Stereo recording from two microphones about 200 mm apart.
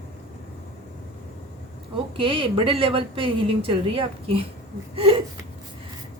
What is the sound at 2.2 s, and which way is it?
A woman's voice, 25° right (ahead or behind).